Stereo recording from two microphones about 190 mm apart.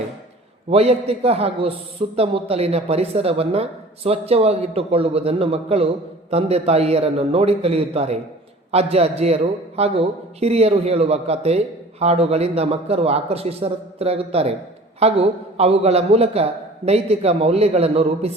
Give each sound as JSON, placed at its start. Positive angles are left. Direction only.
{"t": 0.7, "sound": "speech", "side_deg": -30}